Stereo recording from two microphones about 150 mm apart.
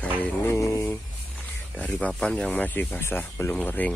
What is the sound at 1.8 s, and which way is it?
Speech, 10° left (ahead or behind).